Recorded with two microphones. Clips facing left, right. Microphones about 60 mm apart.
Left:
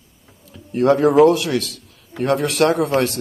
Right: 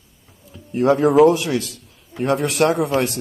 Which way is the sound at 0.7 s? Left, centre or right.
Centre.